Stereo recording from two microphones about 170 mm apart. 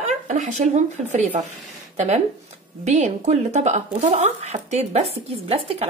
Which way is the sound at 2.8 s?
45° right (ahead or behind).